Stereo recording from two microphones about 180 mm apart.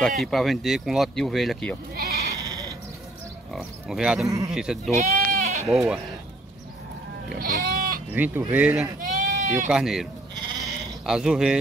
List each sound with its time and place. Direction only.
0.0 s speech: centre (ahead or behind)
2.0 s sheep: 60° right (ahead or behind)
3.5 s speech: 5° right (ahead or behind)
4.9 s goat: 45° right (ahead or behind)
5.7 s speech: centre (ahead or behind)
7.2 s goat: 55° right (ahead or behind)
8.1 s speech: 10° right (ahead or behind)
9.0 s goat: 45° right (ahead or behind)
9.7 s speech: centre (ahead or behind)
11.1 s speech: 5° right (ahead or behind)